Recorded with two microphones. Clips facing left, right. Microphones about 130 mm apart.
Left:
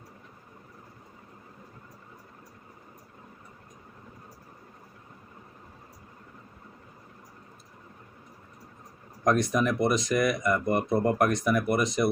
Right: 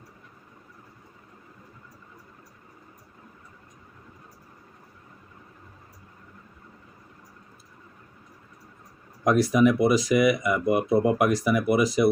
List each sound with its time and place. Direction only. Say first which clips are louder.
9.2 s speech: right 5 dB; 5° right (ahead or behind)